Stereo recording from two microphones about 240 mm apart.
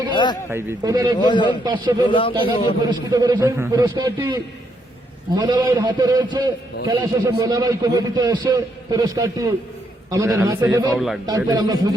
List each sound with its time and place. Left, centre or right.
0.1 s a sound: centre
0.5 s a man's voice: centre
1.2 s a man's voice: centre
1.6 s a man's voice: centre
2.0 s a man's voice: left
2.9 s a man's voice: centre
5.4 s a man's voice: centre
11.3 s a man's voice: centre